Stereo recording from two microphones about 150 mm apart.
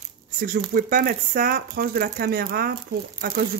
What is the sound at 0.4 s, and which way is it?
Speech, 65° right (ahead or behind).